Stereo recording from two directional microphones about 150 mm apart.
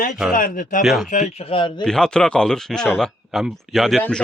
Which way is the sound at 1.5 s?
35° left (ahead or behind).